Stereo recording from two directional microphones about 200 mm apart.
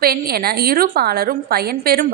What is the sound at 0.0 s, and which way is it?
A woman's voice, 50° right (ahead or behind).